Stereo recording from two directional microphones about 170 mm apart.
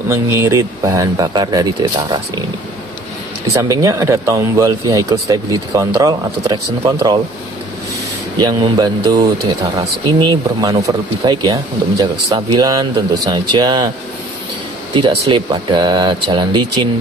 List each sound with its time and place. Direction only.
0.1 s speech: 15° right (ahead or behind)
3.6 s speech: 20° right (ahead or behind)
8.4 s speech: 25° right (ahead or behind)
15.0 s speech: 30° right (ahead or behind)